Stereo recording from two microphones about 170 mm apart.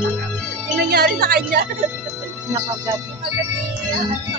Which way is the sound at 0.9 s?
65° right (ahead or behind).